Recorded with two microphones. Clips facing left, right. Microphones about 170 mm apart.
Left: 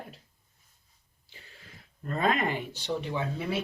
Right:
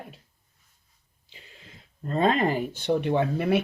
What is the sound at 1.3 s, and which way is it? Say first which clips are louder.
Speech: right 2 dB; 15° right (ahead or behind).